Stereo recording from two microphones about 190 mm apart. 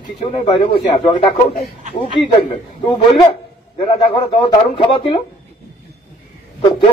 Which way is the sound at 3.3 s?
30° left (ahead or behind).